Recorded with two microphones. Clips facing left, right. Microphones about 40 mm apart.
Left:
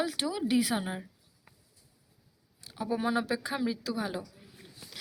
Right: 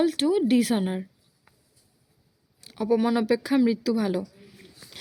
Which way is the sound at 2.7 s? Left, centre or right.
Right.